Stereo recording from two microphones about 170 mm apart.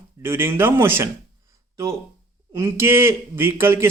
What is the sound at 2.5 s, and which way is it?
Speech, 15° right (ahead or behind).